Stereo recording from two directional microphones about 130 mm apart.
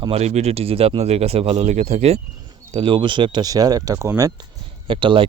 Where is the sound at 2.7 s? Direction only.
40° right (ahead or behind).